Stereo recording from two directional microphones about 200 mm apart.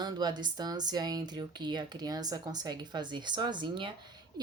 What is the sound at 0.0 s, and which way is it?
Speech, 20° right (ahead or behind).